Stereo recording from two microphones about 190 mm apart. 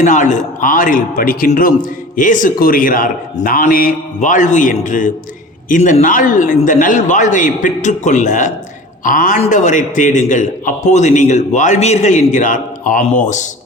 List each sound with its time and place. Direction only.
0.0 s a man's voice: 40° left (ahead or behind)